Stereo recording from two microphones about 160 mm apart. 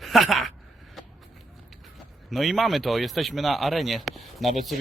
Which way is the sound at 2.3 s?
Centre (ahead or behind).